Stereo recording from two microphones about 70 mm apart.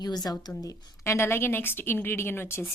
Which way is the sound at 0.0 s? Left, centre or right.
Left.